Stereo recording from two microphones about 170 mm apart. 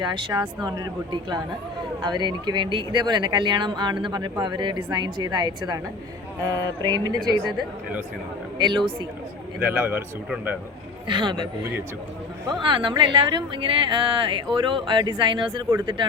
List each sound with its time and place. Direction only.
0.0 s speech: 30° right (ahead or behind)
6.5 s speech: 20° right (ahead or behind)
8.5 s speech: 25° right (ahead or behind)
9.6 s speech: 10° right (ahead or behind)
11.1 s speech: 25° right (ahead or behind)
12.6 s speech: 30° right (ahead or behind)